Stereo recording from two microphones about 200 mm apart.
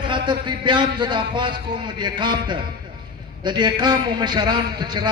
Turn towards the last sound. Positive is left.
turn(degrees=-20)  # may be behind; listen again after turning